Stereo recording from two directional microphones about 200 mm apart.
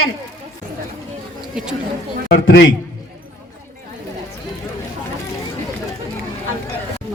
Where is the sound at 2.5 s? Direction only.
65° left (ahead or behind).